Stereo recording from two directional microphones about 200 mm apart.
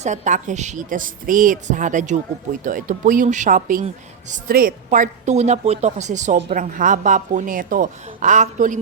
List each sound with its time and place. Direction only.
0.0 s a woman's voice: 35° right (ahead or behind)